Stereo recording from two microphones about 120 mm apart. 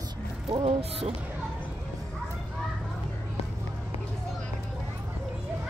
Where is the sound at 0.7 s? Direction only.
55° right (ahead or behind).